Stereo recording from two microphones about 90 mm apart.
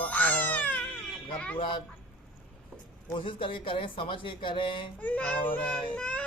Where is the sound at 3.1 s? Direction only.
75° left (ahead or behind).